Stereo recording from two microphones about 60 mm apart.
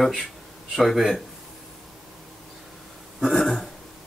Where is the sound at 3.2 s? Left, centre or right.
Centre.